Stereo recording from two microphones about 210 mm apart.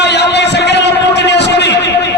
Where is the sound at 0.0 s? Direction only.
55° left (ahead or behind).